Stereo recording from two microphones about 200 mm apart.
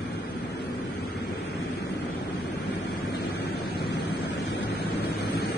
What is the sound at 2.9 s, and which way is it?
Waves, 55° left (ahead or behind).